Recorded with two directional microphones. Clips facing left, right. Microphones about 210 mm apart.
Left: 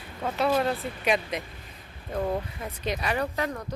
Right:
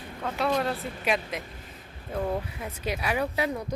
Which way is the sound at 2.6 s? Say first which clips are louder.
Left 1 dB; 10° right (ahead or behind).